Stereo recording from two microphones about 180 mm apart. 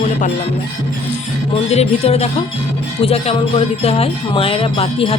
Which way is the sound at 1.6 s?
35° left (ahead or behind).